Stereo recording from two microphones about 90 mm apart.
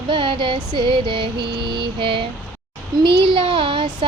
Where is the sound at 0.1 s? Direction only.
65° right (ahead or behind).